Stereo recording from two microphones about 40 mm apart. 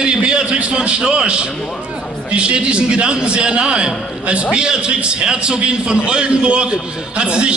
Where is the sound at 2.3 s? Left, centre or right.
Right.